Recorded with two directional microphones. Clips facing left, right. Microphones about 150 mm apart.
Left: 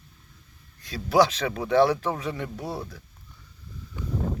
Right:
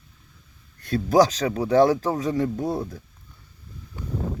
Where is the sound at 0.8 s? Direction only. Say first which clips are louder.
Right 3 dB; 50° right (ahead or behind).